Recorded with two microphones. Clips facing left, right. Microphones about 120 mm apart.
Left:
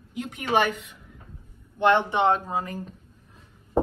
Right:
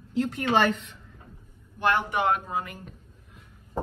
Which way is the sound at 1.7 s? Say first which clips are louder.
Left 4 dB; 25° left (ahead or behind).